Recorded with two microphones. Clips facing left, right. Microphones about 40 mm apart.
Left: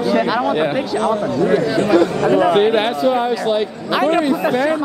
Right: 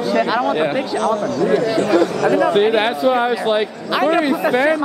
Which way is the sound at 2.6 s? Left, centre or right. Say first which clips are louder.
Even; centre.